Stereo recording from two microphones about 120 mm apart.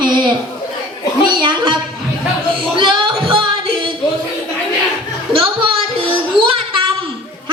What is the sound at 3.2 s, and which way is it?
Music, 45° right (ahead or behind).